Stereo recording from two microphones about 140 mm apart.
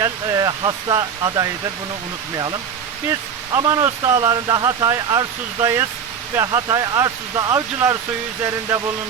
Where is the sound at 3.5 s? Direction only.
25° right (ahead or behind).